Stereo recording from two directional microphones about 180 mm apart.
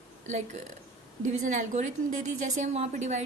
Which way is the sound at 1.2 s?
40° right (ahead or behind).